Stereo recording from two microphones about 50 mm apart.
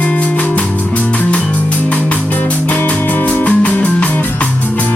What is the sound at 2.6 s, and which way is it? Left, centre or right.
Music, left.